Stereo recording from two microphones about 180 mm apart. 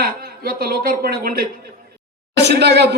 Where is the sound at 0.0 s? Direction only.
55° right (ahead or behind).